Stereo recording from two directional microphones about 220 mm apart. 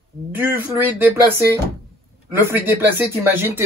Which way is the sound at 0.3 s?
10° right (ahead or behind).